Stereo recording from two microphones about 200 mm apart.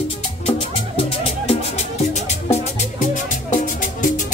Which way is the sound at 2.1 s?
35° left (ahead or behind).